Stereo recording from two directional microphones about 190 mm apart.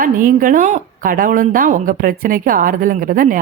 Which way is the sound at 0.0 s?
45° right (ahead or behind).